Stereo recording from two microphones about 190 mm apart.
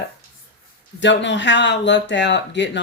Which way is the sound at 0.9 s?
70° left (ahead or behind).